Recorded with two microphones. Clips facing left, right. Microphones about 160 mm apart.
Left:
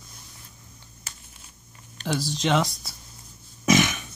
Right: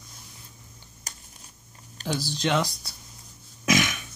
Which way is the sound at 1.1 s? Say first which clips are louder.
Right 1 dB; 40° right (ahead or behind).